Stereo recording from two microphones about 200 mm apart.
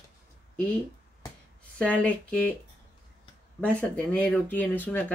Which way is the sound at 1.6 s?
5° left (ahead or behind).